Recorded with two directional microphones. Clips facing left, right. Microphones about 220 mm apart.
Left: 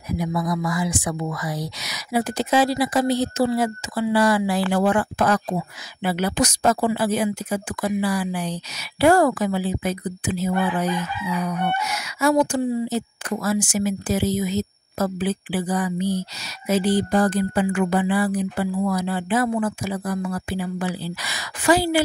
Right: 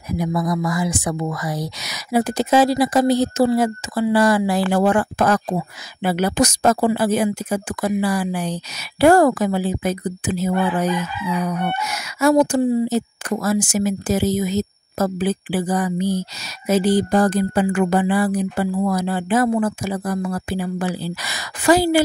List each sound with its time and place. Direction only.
0.2 s speech: 45° right (ahead or behind)